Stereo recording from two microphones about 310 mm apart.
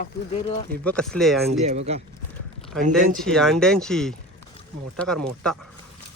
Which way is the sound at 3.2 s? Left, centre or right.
Centre.